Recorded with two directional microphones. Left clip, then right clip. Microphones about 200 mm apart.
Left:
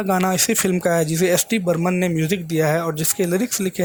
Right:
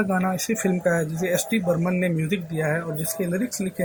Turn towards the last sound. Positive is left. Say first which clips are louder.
# left 6 dB
turn(degrees=45)  # may be behind; listen again after turning